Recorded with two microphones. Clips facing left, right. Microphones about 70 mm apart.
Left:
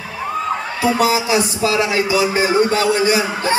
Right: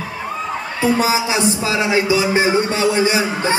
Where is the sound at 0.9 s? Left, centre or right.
Right.